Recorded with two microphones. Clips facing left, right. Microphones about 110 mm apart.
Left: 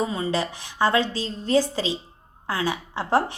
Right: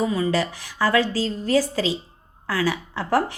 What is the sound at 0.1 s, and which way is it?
A woman's voice, 25° left (ahead or behind).